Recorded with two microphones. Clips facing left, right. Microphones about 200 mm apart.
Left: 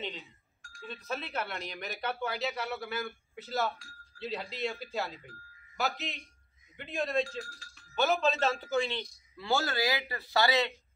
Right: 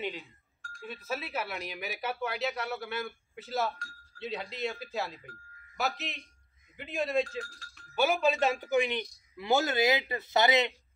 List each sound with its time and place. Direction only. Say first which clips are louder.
0.8 s a man's voice: right 1 dB; 5° right (ahead or behind)